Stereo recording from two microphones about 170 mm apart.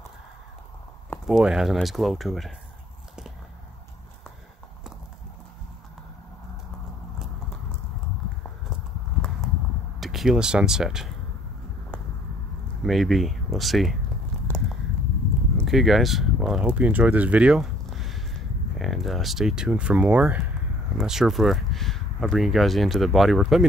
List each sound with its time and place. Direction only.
1.1 s speech: centre (ahead or behind)
9.9 s speech: centre (ahead or behind)
12.8 s speech: centre (ahead or behind)
15.5 s speech: centre (ahead or behind)